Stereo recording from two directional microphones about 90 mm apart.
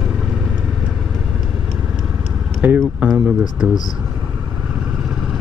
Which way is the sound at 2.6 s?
20° right (ahead or behind).